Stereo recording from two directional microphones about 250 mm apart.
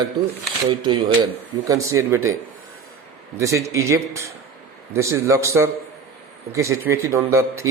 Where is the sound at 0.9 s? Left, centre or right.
Centre.